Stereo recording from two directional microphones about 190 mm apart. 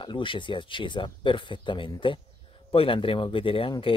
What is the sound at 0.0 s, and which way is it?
Speech, 25° left (ahead or behind).